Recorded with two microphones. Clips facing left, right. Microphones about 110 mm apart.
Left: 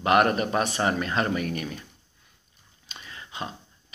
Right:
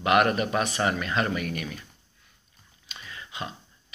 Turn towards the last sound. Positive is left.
turn(degrees=35)  # may be behind; listen again after turning